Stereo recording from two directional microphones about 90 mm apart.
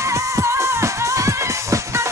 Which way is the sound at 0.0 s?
35° right (ahead or behind).